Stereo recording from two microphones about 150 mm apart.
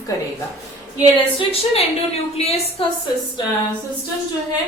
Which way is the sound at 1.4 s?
40° left (ahead or behind).